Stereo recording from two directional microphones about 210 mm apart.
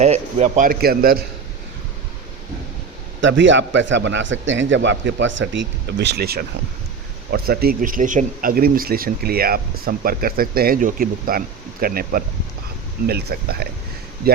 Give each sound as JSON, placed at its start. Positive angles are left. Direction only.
{"t": 0.0, "sound": "speech", "side_deg": -30}
{"t": 3.2, "sound": "a man's voice", "side_deg": -60}